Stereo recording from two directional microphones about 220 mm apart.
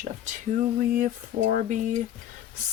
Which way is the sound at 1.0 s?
35° right (ahead or behind).